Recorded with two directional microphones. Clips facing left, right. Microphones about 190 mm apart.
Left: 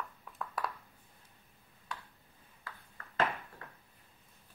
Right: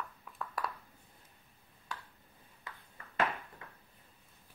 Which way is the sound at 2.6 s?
20° right (ahead or behind).